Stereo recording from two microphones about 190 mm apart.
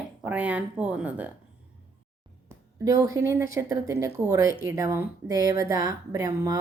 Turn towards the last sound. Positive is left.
turn(degrees=-20)  # may be behind; listen again after turning